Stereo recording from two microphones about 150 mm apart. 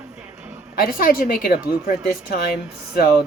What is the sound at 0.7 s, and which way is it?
Speech, 75° left (ahead or behind).